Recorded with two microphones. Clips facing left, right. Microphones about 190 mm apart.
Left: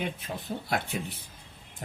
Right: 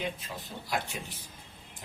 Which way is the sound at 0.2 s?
60° left (ahead or behind).